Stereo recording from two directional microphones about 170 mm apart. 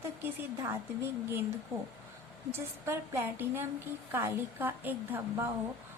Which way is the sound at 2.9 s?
15° right (ahead or behind).